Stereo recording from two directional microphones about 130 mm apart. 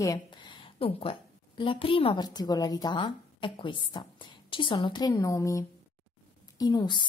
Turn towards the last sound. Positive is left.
turn(degrees=35)  # may be behind; listen again after turning